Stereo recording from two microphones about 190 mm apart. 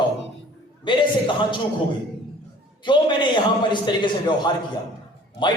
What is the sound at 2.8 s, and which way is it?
A man's voice, 25° left (ahead or behind).